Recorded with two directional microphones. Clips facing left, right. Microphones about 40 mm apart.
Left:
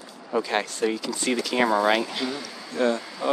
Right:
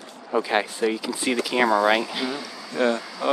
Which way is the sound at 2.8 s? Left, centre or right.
Right.